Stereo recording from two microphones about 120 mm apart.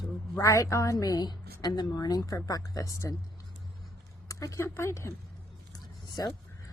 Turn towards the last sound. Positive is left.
turn(degrees=30)  # may be behind; listen again after turning